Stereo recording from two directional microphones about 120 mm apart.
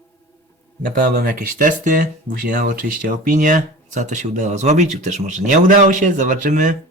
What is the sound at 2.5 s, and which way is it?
Speech, 90° right.